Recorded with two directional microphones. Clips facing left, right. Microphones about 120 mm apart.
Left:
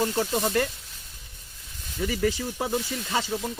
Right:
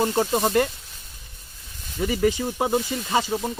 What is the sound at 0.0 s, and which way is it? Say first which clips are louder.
Speech: right 4 dB; 30° right (ahead or behind).